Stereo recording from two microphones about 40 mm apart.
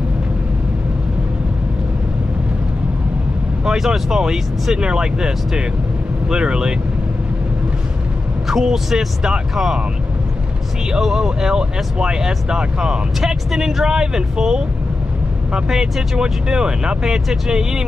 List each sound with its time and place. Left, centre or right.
3.6 s speech: centre
8.5 s speech: centre
11.0 s speech: centre
15.7 s speech: centre